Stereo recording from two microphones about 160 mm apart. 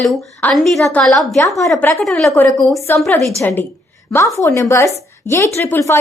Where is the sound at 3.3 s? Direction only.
15° left (ahead or behind).